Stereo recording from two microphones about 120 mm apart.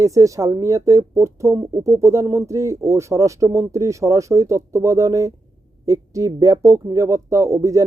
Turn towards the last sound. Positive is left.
turn(degrees=-25)  # may be behind; listen again after turning